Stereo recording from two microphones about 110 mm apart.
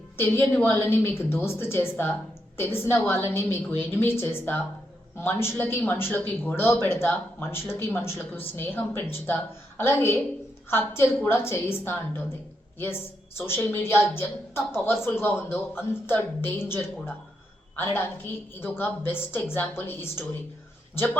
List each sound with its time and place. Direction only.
0.2 s a woman's voice: 20° left (ahead or behind)